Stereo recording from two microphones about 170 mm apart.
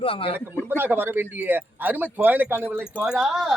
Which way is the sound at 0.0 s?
35° left (ahead or behind).